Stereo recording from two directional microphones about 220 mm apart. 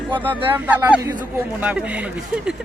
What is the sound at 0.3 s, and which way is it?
Speech, 10° right (ahead or behind).